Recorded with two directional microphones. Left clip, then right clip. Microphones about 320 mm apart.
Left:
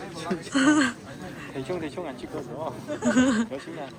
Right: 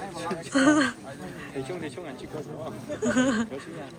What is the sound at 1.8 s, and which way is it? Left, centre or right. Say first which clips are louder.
Speech: left 3 dB; centre.